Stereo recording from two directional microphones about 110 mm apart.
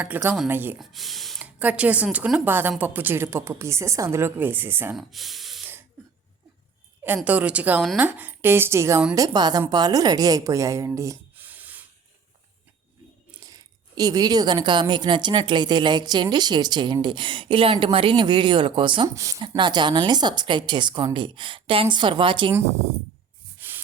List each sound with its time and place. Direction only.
0.4 s a woman's voice: 20° right (ahead or behind)
0.8 s speech: centre (ahead or behind)
1.5 s a woman's voice: 15° right (ahead or behind)
4.9 s speech: centre (ahead or behind)
7.3 s a woman's voice: 10° right (ahead or behind)
9.1 s a woman's voice: 35° right (ahead or behind)
11.3 s a sound: 15° right (ahead or behind)
13.4 s a woman's voice: 35° right (ahead or behind)
19.0 s a woman's voice: 30° right (ahead or behind)
19.4 s a woman's voice: 45° right (ahead or behind)
23.6 s a sound: 20° right (ahead or behind)